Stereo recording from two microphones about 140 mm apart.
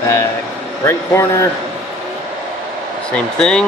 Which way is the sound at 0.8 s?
20° left (ahead or behind).